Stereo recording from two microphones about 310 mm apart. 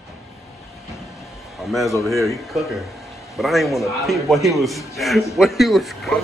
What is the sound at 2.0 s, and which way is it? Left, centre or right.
A man's voice, centre.